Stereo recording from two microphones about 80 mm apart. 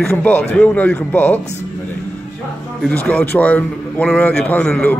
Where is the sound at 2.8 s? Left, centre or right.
Centre.